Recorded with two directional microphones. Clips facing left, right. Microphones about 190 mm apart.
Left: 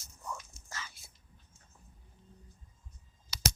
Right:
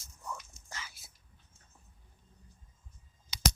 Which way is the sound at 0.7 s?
15° right (ahead or behind).